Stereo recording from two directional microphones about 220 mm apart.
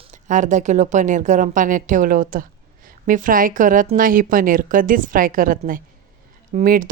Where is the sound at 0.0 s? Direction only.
35° right (ahead or behind).